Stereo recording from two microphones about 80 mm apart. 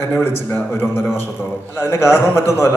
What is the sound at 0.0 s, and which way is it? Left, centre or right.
A man's voice, left.